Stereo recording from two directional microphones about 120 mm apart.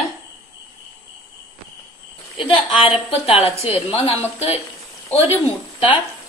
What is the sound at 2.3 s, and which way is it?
A woman's voice, 50° left (ahead or behind).